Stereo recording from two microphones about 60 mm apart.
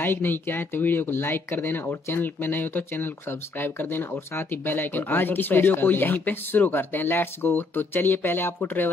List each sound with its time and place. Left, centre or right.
0.0 s speech: left